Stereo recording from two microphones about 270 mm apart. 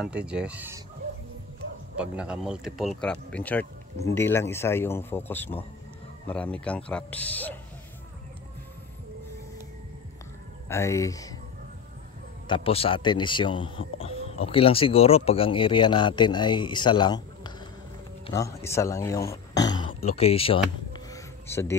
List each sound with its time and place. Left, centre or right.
0.0 s speech: centre
2.0 s speech: centre
10.7 s speech: centre
12.4 s speech: centre
20.9 s a sound: centre